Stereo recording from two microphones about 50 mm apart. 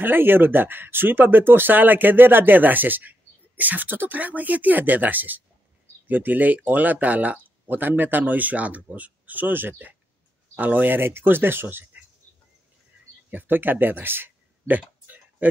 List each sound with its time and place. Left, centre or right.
0.0 s speech: right
13.3 s speech: right